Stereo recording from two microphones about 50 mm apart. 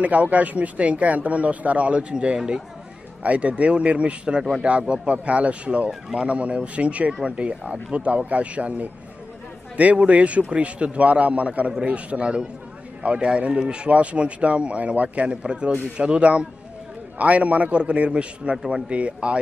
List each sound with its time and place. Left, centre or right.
0.0 s speech: right